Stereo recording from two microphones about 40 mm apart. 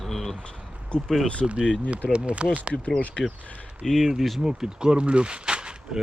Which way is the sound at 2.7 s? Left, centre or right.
Left.